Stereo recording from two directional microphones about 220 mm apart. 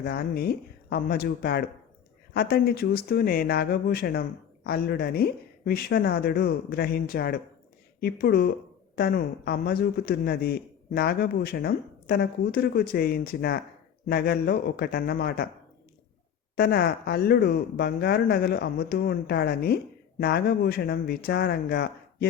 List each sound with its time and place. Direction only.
0.0 s speech: 45° left (ahead or behind)
16.6 s speech: 45° left (ahead or behind)